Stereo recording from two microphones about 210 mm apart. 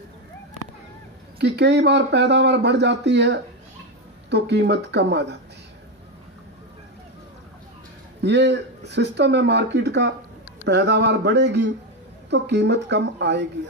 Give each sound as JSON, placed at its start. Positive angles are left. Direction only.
{"t": 1.4, "sound": "speech", "side_deg": -55}
{"t": 8.2, "sound": "speech", "side_deg": -55}